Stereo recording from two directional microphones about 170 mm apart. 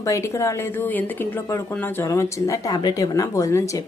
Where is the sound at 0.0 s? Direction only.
20° left (ahead or behind).